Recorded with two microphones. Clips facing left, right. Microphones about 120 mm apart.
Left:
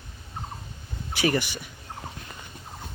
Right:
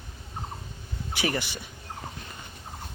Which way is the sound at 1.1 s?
20° right (ahead or behind).